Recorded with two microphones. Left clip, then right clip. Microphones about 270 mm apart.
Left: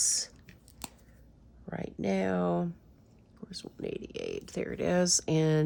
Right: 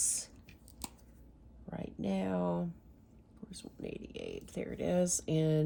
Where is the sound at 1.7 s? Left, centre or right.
Left.